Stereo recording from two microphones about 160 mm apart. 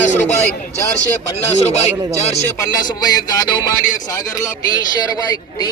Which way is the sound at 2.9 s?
25° left (ahead or behind).